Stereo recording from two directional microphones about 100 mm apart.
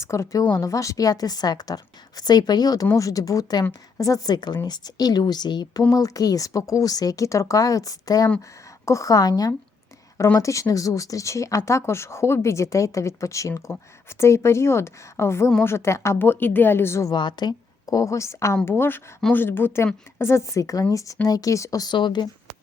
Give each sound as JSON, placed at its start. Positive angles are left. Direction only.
{"t": 0.0, "sound": "speech", "side_deg": 30}
{"t": 17.1, "sound": "speech", "side_deg": 45}
{"t": 21.9, "sound": "speech", "side_deg": 50}